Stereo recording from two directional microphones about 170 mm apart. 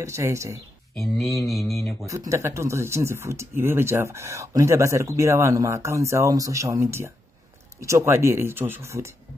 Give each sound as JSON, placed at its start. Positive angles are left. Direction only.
{"t": 0.0, "sound": "speech", "side_deg": -15}
{"t": 0.9, "sound": "speech", "side_deg": 0}
{"t": 2.0, "sound": "speech", "side_deg": -20}